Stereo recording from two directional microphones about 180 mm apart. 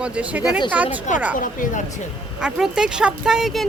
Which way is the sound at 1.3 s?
50° left (ahead or behind).